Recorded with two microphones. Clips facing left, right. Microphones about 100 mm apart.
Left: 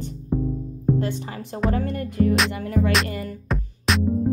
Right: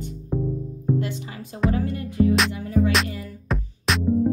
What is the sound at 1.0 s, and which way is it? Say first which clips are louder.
Speech: left 2 dB; 40° left (ahead or behind).